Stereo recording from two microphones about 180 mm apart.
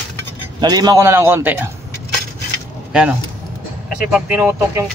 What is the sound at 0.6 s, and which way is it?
Speech, 20° right (ahead or behind).